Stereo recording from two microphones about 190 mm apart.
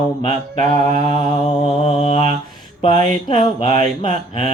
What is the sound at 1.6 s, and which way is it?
Mantra, 30° left (ahead or behind).